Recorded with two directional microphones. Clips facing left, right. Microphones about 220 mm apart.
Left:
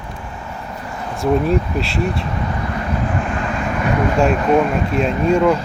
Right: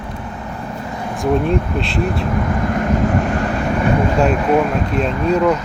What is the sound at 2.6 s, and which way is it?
Vehicle, 50° right (ahead or behind).